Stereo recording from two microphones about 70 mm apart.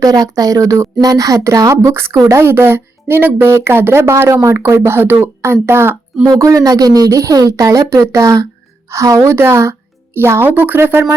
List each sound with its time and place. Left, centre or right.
0.0 s speech: right
1.7 s a woman's voice: right
6.4 s a woman's voice: right